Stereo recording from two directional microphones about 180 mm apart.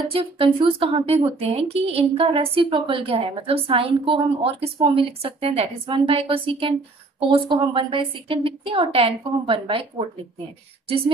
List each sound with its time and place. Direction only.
0.1 s a woman's voice: 30° right (ahead or behind)